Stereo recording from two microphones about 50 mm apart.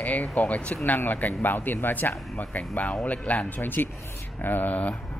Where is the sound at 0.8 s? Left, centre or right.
Left.